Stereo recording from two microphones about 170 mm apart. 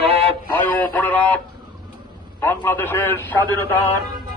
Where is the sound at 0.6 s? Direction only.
10° left (ahead or behind).